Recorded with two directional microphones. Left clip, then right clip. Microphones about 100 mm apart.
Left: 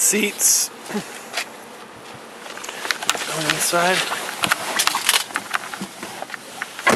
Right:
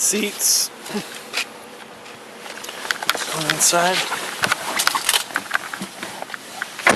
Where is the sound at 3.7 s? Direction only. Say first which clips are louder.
Right 1 dB; 15° right (ahead or behind).